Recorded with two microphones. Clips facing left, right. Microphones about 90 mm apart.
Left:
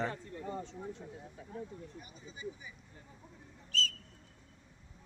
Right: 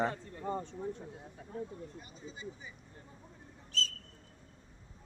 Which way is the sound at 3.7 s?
30° right (ahead or behind).